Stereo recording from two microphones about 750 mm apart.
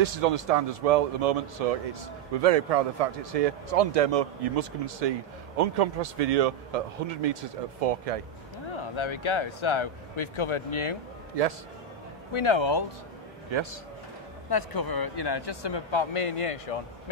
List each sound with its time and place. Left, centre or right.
0.0 s speech: right
8.9 s speech: left
12.3 s speech: left
13.5 s a man's voice: right
14.5 s speech: left